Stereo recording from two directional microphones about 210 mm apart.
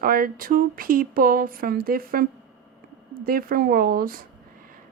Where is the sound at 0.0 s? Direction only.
45° right (ahead or behind).